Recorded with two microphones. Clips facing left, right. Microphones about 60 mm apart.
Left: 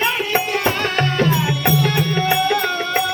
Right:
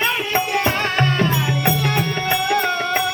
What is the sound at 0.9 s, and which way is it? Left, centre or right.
Music, right.